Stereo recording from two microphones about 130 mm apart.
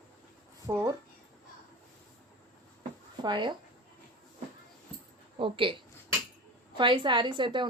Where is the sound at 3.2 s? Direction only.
35° right (ahead or behind).